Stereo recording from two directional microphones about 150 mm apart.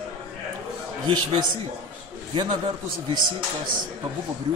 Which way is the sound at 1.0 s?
35° right (ahead or behind).